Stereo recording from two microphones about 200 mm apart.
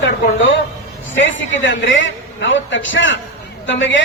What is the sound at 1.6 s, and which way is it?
A man's voice, 70° left (ahead or behind).